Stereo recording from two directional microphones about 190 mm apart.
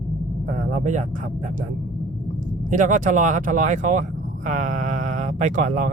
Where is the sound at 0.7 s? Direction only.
40° right (ahead or behind).